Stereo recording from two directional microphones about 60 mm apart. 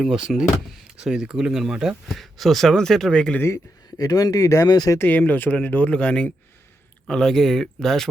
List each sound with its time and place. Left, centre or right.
0.0 s speech: centre
2.0 s speech: centre
3.5 s speech: left
4.9 s speech: left
7.1 s speech: centre